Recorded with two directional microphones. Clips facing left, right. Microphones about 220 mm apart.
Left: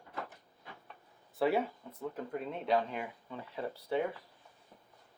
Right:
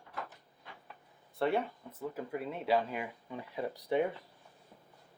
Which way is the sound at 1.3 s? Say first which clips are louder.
Left 1 dB; centre (ahead or behind).